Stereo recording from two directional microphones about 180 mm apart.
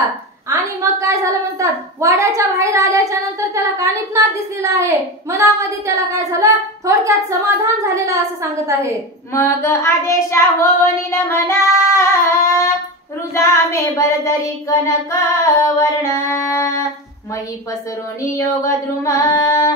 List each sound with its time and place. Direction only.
0.5 s a sound: 15° right (ahead or behind)
9.3 s child singing: 15° left (ahead or behind)
15.4 s singing: 15° left (ahead or behind)
18.2 s child singing: 15° left (ahead or behind)